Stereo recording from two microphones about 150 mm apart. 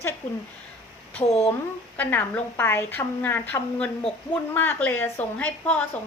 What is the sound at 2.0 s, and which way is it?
A woman's voice, 10° left (ahead or behind).